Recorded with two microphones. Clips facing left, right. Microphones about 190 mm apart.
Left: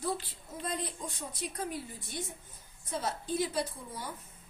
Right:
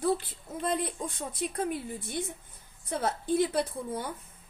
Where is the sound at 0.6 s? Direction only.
60° right (ahead or behind).